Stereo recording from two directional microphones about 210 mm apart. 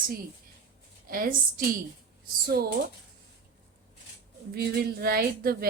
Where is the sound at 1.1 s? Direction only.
40° right (ahead or behind).